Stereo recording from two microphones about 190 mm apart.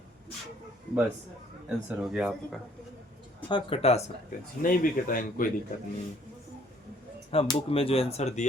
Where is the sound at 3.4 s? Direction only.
25° left (ahead or behind).